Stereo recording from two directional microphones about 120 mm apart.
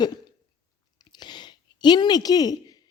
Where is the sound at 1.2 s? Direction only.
40° left (ahead or behind).